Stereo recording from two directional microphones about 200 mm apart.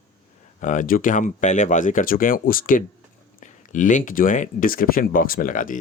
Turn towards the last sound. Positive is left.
turn(degrees=40)  # may be behind; listen again after turning